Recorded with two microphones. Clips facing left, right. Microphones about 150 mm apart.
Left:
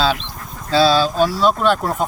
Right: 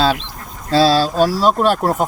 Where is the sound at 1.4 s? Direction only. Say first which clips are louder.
Right 1 dB; 40° right (ahead or behind).